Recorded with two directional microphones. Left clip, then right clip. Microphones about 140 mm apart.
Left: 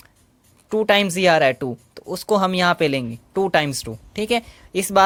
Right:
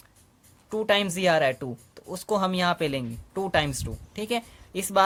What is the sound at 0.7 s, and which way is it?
Speech, 35° left (ahead or behind).